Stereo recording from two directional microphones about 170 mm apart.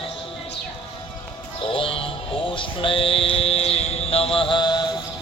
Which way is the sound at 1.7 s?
30° left (ahead or behind).